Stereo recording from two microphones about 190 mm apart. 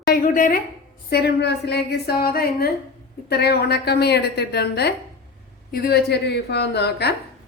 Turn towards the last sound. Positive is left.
turn(degrees=60)  # may be behind; listen again after turning